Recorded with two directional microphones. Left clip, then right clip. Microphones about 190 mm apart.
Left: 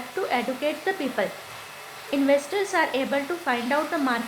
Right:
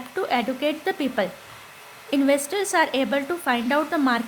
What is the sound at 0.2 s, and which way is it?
Speech, 45° right (ahead or behind).